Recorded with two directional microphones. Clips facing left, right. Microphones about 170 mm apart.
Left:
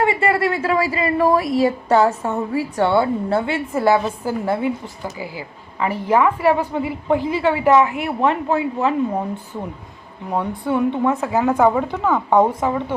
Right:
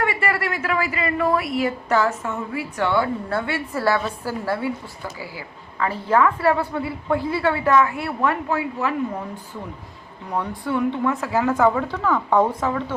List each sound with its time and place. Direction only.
0.0 s a woman's voice: 25° left (ahead or behind)
10.7 s speech: 20° left (ahead or behind)